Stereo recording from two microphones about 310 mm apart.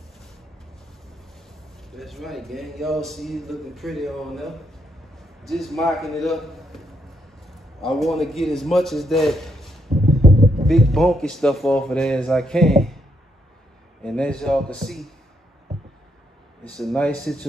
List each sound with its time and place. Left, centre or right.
1.9 s a man's voice: centre
14.0 s a man's voice: centre
16.6 s a man's voice: centre